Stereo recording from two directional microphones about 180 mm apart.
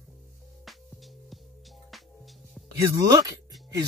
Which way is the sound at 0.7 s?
Centre (ahead or behind).